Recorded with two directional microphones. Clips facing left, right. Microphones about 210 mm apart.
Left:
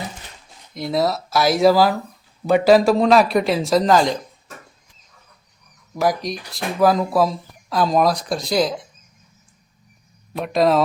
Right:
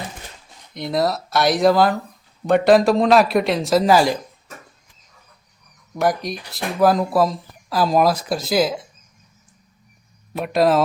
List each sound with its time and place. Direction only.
0.7 s speech: centre (ahead or behind)
5.9 s speech: centre (ahead or behind)
10.3 s speech: 5° right (ahead or behind)